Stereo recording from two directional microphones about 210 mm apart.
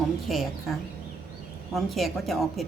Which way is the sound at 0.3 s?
Centre (ahead or behind).